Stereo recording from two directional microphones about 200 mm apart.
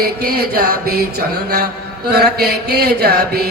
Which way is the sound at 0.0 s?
50° right (ahead or behind).